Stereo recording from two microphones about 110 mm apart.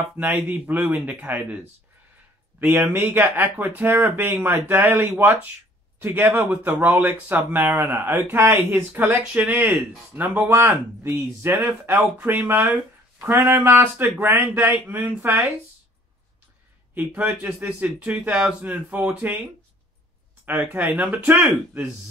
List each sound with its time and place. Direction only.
0.2 s speech: 15° right (ahead or behind)
2.6 s speech: 20° right (ahead or behind)
16.9 s speech: 15° right (ahead or behind)
20.4 s speech: 15° right (ahead or behind)